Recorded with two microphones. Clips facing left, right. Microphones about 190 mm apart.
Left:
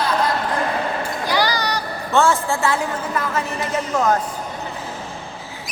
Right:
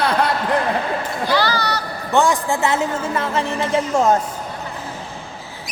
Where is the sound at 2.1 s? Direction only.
15° right (ahead or behind).